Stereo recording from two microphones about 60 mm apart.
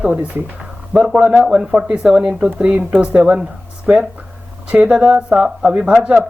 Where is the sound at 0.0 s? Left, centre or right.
Right.